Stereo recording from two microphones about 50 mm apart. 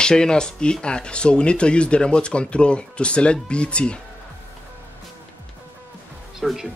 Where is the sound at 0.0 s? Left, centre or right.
Centre.